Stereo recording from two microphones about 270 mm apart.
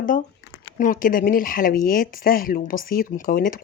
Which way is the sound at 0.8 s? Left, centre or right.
Left.